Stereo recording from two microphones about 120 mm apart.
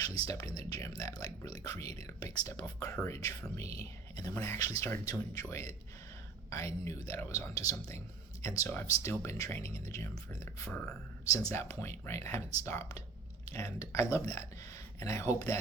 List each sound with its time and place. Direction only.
0.3 s speech: 30° left (ahead or behind)